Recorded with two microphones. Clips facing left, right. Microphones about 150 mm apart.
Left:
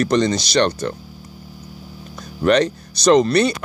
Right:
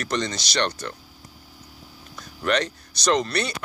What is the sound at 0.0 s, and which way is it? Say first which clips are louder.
Speech: left 10 dB; 35° left (ahead or behind).